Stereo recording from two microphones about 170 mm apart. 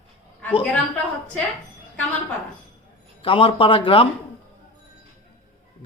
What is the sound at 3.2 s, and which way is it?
Speech, 35° left (ahead or behind).